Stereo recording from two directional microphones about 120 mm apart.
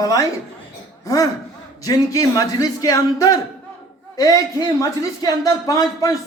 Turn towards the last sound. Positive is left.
turn(degrees=30)  # may be behind; listen again after turning